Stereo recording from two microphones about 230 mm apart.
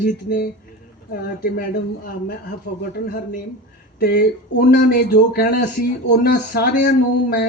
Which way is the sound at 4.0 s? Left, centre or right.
Left.